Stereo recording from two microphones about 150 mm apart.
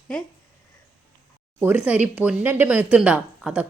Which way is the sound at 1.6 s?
10° right (ahead or behind).